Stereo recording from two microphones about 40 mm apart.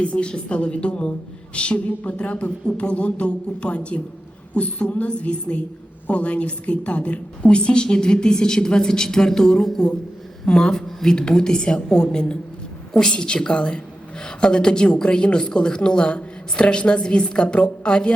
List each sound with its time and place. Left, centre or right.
0.0 s a woman's voice: left